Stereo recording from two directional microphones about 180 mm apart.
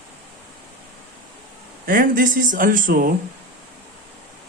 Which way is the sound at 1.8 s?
50° right (ahead or behind).